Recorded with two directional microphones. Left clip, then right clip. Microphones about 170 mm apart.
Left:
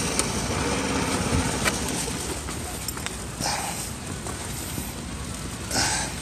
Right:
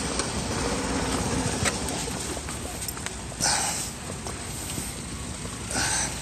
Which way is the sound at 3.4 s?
25° right (ahead or behind).